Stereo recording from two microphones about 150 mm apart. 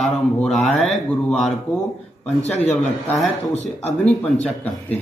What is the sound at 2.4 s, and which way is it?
Speech, 45° left (ahead or behind).